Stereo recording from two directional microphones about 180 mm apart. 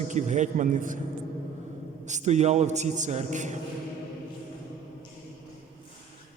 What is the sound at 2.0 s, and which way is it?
A man's voice, 40° right (ahead or behind).